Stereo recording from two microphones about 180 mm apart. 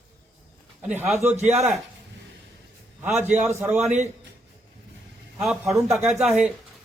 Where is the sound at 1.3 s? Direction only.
40° right (ahead or behind).